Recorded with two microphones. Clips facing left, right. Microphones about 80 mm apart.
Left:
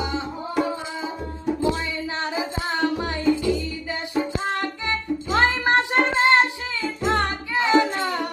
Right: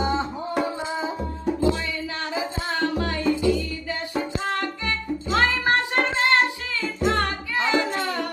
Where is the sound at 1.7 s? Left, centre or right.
Left.